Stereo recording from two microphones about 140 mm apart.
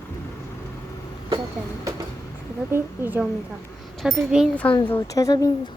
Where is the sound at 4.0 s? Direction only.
Centre (ahead or behind).